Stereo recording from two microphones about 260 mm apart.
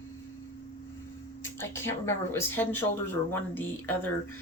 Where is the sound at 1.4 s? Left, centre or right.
Centre.